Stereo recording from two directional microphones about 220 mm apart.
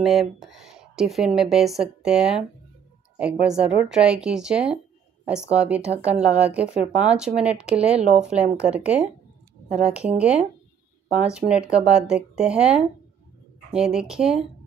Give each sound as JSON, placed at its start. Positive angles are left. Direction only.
{"t": 0.0, "sound": "speech", "side_deg": 0}
{"t": 7.9, "sound": "speech", "side_deg": -30}
{"t": 8.2, "sound": "speech", "side_deg": -5}